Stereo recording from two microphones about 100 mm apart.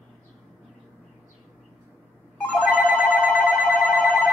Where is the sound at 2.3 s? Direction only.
10° left (ahead or behind).